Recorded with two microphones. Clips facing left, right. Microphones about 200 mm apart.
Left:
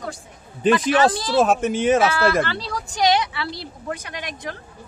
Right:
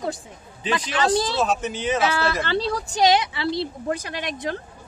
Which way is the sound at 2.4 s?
25° right (ahead or behind).